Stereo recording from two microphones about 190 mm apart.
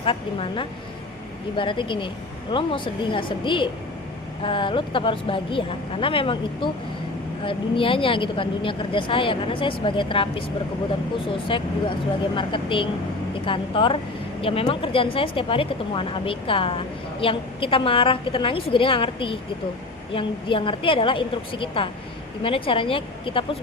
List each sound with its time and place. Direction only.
0.0 s speech: 30° left (ahead or behind)